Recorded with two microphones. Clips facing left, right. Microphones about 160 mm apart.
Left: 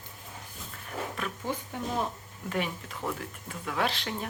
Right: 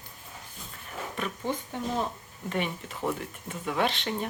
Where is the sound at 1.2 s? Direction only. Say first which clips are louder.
Right 6 dB; centre (ahead or behind).